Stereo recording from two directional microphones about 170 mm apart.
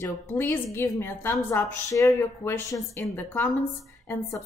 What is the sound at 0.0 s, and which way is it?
A woman's voice, 15° left (ahead or behind).